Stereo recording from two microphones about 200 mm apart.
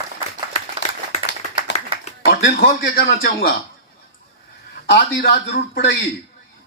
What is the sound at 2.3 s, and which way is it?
Speech, 55° left (ahead or behind).